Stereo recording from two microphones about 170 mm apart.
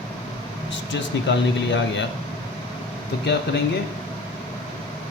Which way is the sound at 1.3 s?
90° left.